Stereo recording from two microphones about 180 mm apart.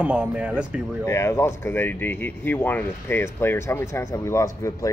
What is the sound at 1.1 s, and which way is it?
Speech, 15° left (ahead or behind).